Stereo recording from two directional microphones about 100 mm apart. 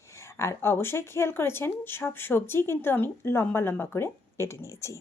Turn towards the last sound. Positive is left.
turn(degrees=30)  # may be behind; listen again after turning